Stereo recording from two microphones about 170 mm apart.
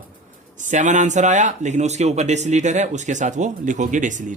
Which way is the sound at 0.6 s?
45° right (ahead or behind).